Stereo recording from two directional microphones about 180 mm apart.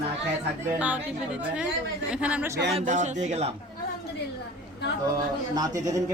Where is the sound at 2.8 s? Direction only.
40° right (ahead or behind).